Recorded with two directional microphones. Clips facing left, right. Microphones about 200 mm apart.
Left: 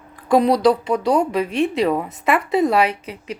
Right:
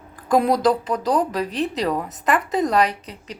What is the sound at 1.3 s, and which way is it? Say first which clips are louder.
Speech: left 4 dB; 35° right (ahead or behind).